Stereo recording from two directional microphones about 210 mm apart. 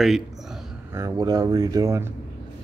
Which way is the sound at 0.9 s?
15° right (ahead or behind).